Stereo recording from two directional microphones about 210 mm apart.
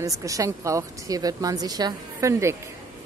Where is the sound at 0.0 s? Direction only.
15° right (ahead or behind).